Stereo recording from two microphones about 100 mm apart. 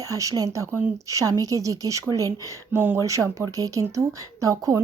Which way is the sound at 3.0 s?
30° right (ahead or behind).